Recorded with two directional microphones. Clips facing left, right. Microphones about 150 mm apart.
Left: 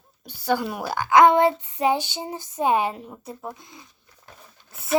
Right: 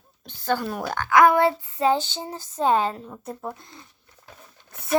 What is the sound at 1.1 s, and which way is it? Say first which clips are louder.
Child singing: left 1 dB; 20° left (ahead or behind).